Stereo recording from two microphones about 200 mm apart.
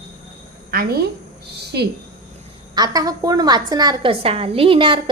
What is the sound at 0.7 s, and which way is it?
Speech, 50° right (ahead or behind).